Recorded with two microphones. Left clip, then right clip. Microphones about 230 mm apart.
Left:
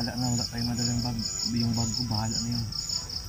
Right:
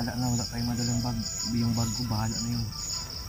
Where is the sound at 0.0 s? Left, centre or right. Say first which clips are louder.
Left 1 dB; centre.